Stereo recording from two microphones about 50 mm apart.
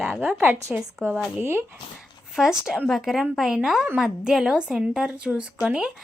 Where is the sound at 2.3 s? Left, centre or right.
Centre.